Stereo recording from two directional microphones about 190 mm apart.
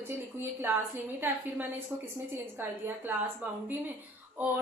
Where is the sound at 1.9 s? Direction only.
10° right (ahead or behind).